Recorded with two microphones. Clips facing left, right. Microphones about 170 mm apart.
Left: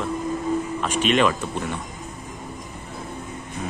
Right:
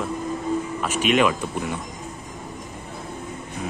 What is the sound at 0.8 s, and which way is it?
Speech, 10° right (ahead or behind).